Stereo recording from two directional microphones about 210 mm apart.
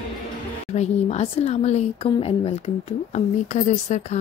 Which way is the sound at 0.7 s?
30° left (ahead or behind).